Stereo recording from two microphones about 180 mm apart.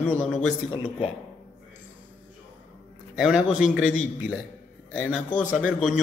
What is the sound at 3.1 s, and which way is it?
Speech, 5° right (ahead or behind).